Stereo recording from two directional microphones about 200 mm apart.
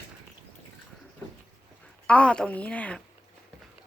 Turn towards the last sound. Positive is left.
turn(degrees=5)  # may be behind; listen again after turning